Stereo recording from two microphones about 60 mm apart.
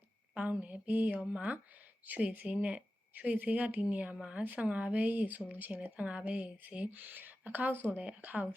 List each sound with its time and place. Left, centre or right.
0.3 s speech: right
4.4 s speech: right